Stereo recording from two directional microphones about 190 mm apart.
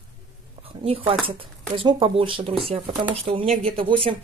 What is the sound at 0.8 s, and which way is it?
Speech, 30° right (ahead or behind).